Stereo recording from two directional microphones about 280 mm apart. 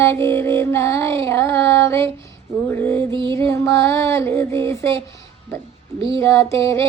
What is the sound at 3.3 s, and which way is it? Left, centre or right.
Speech, centre.